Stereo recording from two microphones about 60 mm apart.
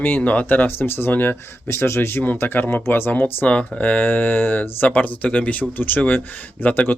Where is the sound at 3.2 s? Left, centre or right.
Left.